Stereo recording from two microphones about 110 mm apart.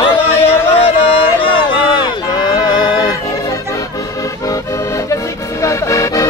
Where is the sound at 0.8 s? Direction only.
55° left (ahead or behind).